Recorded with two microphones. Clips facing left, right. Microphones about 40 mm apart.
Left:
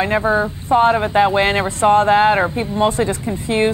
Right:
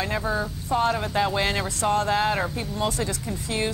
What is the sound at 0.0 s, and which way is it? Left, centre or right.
Speech, left.